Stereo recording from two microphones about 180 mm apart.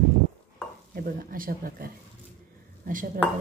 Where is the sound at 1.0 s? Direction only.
50° right (ahead or behind).